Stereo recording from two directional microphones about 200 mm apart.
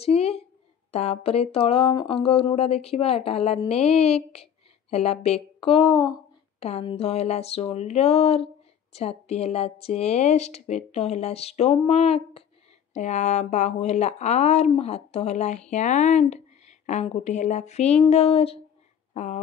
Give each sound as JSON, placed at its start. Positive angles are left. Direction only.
{"t": 0.0, "sound": "a woman's voice", "side_deg": 30}